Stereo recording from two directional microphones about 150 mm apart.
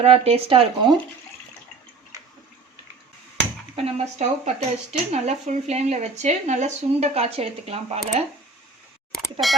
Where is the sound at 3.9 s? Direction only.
45° right (ahead or behind).